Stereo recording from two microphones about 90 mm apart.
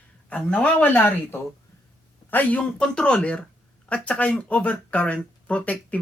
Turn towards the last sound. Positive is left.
turn(degrees=15)  # may be behind; listen again after turning